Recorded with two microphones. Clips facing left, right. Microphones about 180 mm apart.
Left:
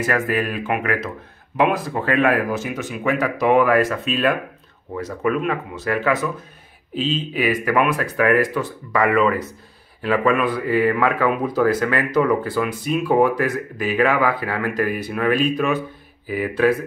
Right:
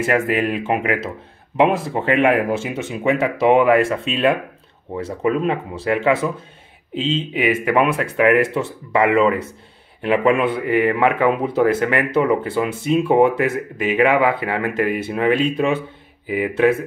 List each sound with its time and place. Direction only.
0.0 s speech: 25° right (ahead or behind)